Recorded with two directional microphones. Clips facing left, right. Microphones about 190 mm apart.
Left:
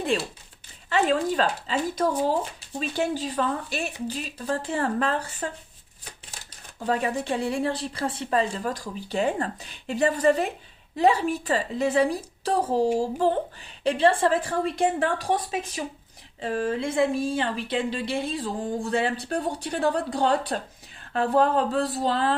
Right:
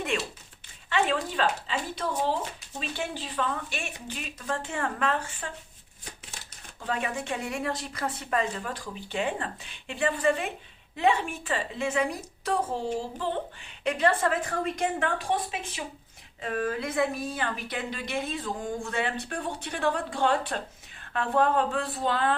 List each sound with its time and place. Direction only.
0.1 s a woman's voice: 35° left (ahead or behind)
6.8 s a woman's voice: 35° left (ahead or behind)
13.8 s a woman's voice: 30° left (ahead or behind)